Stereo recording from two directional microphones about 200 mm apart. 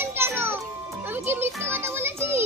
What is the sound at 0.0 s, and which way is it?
Music, 10° right (ahead or behind).